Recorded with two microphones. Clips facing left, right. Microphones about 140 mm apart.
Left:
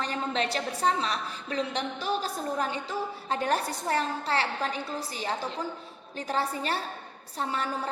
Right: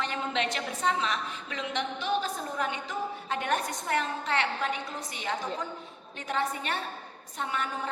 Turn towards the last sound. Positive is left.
turn(degrees=35)  # may be behind; listen again after turning